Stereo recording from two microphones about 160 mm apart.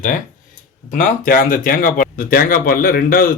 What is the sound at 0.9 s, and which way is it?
Speech, 55° left (ahead or behind).